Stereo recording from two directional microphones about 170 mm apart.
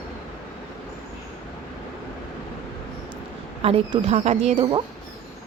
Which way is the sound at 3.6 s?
35° right (ahead or behind).